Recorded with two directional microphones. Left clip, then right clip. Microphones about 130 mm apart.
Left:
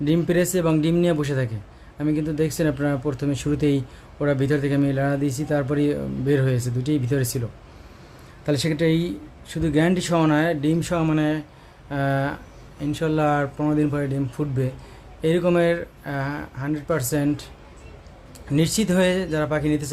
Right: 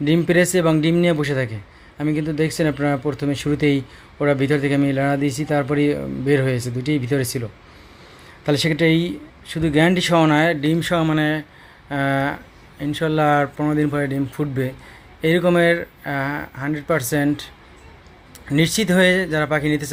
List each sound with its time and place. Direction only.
0.0 s speech: 20° right (ahead or behind)
8.4 s speech: 20° right (ahead or behind)
18.5 s speech: 15° right (ahead or behind)